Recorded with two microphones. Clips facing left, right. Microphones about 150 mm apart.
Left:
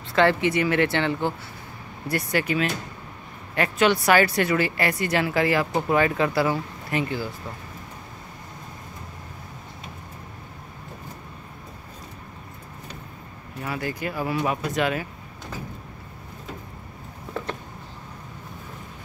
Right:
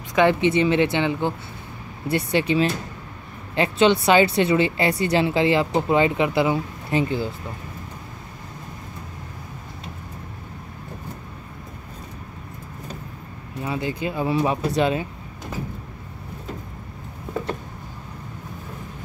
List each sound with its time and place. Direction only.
0.1 s speech: 15° right (ahead or behind)
13.7 s speech: 20° right (ahead or behind)